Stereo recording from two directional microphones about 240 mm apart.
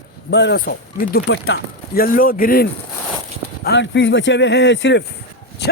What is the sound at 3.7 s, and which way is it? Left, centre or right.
Speech, left.